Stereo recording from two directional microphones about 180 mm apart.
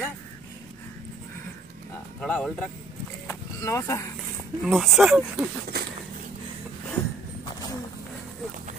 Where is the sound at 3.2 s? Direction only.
15° left (ahead or behind).